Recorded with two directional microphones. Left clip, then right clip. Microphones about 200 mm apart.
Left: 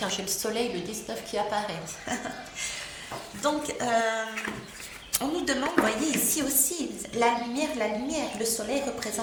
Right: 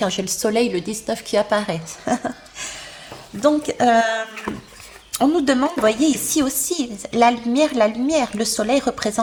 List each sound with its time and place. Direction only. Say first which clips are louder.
0.0 s a woman's voice: right 9 dB; 50° right (ahead or behind)
3.4 s a woman's voice: right 12 dB; 50° right (ahead or behind)
4.5 s a sound: right 7 dB; 30° right (ahead or behind)
5.1 s a woman's voice: right 11 dB; 45° right (ahead or behind)